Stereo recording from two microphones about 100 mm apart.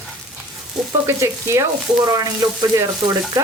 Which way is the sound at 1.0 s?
25° right (ahead or behind).